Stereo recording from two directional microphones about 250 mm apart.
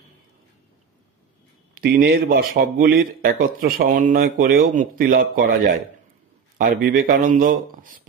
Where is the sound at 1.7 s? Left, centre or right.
Right.